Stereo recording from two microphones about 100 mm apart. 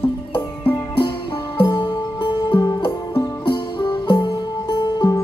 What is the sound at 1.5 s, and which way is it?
Music, 50° left (ahead or behind).